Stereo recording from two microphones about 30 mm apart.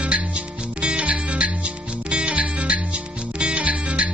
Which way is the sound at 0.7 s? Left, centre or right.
Right.